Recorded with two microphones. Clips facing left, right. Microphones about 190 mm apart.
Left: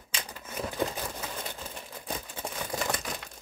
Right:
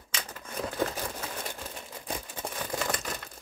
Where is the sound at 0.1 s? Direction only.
15° left (ahead or behind).